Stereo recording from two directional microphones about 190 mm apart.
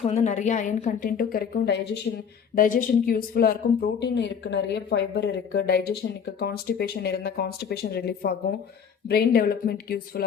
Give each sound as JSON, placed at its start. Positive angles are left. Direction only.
{"t": 0.0, "sound": "a woman's voice", "side_deg": 35}